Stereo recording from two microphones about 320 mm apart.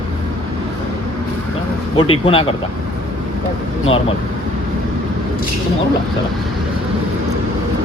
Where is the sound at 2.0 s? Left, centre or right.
Centre.